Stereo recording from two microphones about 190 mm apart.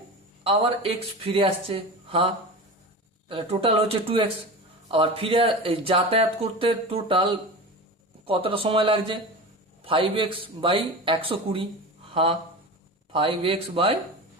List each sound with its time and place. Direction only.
0.4 s speech: 30° right (ahead or behind)